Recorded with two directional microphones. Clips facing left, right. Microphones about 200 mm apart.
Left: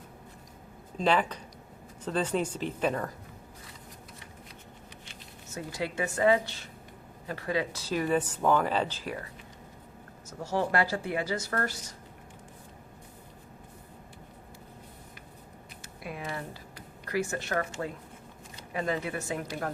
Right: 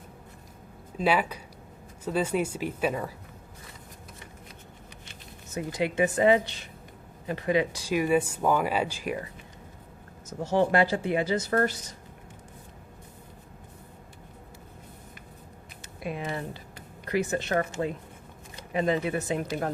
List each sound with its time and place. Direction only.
0.9 s speech: 10° right (ahead or behind)
5.5 s speech: 20° right (ahead or behind)
10.2 s speech: 20° right (ahead or behind)
15.8 s a sound: 25° right (ahead or behind)
17.1 s speech: 20° right (ahead or behind)